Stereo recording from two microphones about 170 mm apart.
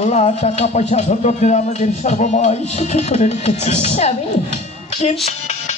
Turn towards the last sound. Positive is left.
turn(degrees=40)  # may be behind; listen again after turning